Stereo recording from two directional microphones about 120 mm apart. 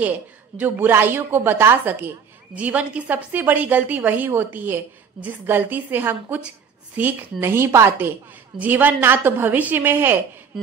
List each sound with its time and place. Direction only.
0.6 s a woman's voice: 15° right (ahead or behind)